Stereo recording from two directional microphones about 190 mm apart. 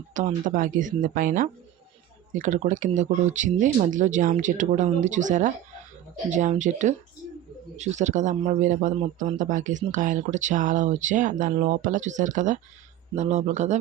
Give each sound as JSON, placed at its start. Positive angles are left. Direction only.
{"t": 0.1, "sound": "speech", "side_deg": -40}